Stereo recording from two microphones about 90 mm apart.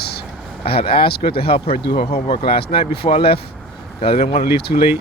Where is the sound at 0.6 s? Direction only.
90° left.